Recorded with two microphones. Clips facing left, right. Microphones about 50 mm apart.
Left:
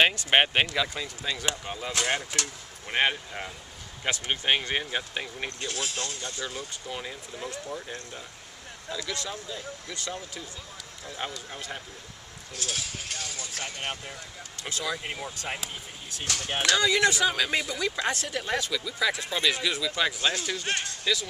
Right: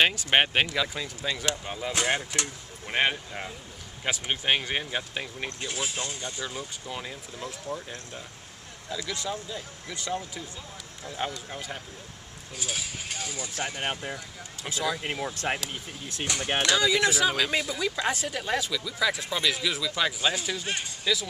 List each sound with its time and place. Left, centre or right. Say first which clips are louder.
0.0 s speech: left 1 dB; centre
1.9 s speech: right 1 dB; centre
2.9 s speech: even; centre
5.6 s speech: right 1 dB; centre
6.9 s speech: left 2 dB; centre
8.9 s speech: right 2 dB; centre
11.1 s speech: right 3 dB; centre
14.1 s speech: right 2 dB; centre
15.5 s speech: right 5 dB; right
16.3 s speech: right 2 dB; right
16.7 s speech: left 2 dB; centre